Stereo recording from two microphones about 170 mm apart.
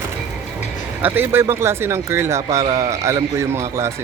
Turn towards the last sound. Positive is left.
turn(degrees=-15)  # may be behind; listen again after turning